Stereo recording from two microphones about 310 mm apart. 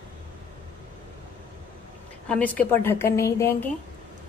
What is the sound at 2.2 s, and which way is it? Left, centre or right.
A woman's voice, centre.